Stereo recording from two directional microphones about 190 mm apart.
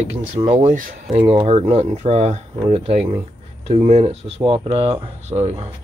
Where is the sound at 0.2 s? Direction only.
40° right (ahead or behind).